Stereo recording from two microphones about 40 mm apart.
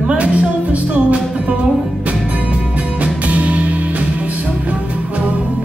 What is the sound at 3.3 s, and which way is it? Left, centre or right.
Music, right.